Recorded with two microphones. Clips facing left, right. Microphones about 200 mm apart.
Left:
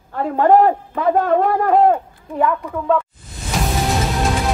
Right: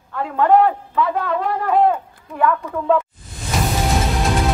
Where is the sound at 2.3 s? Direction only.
15° left (ahead or behind).